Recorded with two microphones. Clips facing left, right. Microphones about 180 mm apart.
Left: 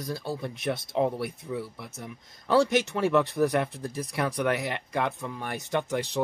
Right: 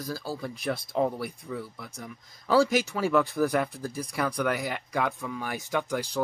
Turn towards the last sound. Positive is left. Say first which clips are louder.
# left 1 dB
turn(degrees=15)  # may be behind; listen again after turning